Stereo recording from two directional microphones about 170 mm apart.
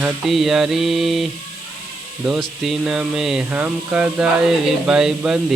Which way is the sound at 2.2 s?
5° right (ahead or behind).